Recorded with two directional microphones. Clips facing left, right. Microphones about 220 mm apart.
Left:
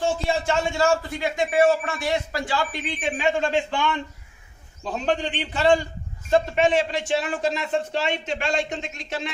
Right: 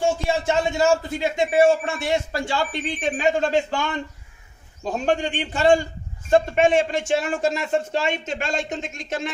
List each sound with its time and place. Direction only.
0.0 s a man's voice: 20° right (ahead or behind)
3.0 s a man's voice: 40° right (ahead or behind)